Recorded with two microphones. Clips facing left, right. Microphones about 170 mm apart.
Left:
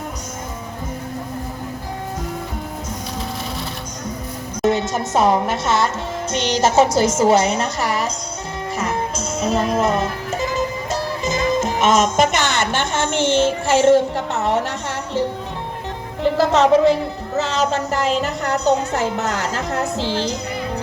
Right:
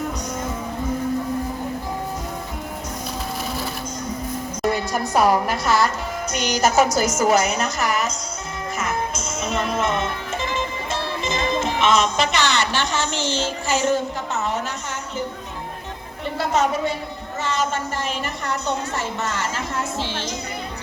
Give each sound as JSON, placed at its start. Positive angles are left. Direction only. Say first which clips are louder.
{"t": 4.6, "sound": "a woman's voice", "louder": "left 4 dB", "side_deg": 20}
{"t": 8.8, "sound": "music", "louder": "left 2 dB", "side_deg": 35}
{"t": 16.2, "sound": "a woman's voice", "louder": "left 6 dB", "side_deg": 85}
{"t": 18.6, "sound": "a woman's voice", "louder": "left 11 dB", "side_deg": 40}